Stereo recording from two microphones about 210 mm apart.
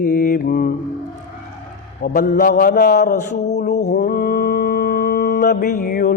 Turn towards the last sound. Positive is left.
turn(degrees=40)  # may be behind; listen again after turning